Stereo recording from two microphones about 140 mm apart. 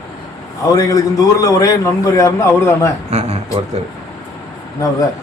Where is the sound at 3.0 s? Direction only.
50° right (ahead or behind).